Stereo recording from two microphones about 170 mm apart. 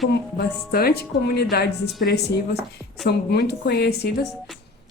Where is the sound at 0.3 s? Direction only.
65° left (ahead or behind).